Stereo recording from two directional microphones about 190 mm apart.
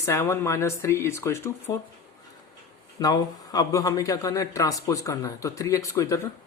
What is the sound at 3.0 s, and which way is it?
Speech, 20° left (ahead or behind).